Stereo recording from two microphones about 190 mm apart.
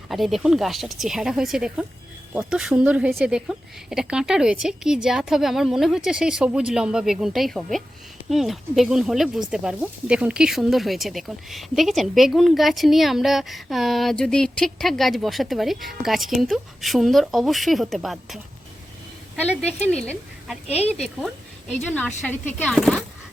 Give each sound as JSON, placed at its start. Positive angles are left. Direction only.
{"t": 0.1, "sound": "speech", "side_deg": 0}
{"t": 20.7, "sound": "speech", "side_deg": 35}
{"t": 21.2, "sound": "speech", "side_deg": 5}